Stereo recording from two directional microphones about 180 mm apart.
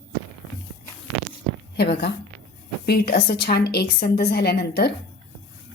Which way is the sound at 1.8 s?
65° left (ahead or behind).